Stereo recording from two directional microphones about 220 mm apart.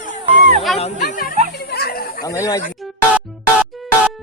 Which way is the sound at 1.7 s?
45° left (ahead or behind).